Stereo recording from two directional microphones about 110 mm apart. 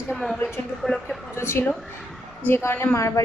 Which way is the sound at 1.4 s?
25° left (ahead or behind).